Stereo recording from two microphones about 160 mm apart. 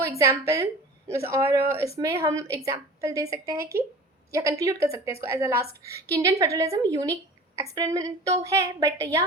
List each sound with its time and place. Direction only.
0.0 s a woman's voice: 20° right (ahead or behind)